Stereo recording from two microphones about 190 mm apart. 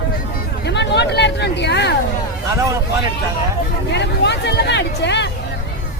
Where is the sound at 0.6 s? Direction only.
60° left (ahead or behind).